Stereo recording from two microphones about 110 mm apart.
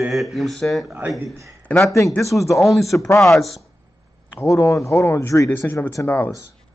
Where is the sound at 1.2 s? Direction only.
25° right (ahead or behind).